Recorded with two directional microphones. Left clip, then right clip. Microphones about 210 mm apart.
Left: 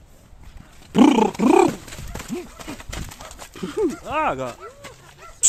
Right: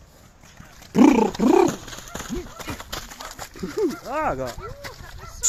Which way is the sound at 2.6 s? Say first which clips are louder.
Right 2 dB; 25° right (ahead or behind).